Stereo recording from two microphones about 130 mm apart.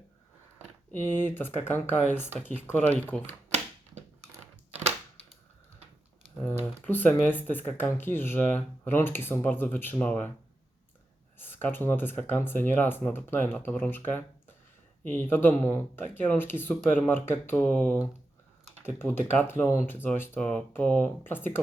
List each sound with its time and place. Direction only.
0.9 s speech: 15° left (ahead or behind)
6.8 s speech: 15° left (ahead or behind)
11.3 s speech: 15° left (ahead or behind)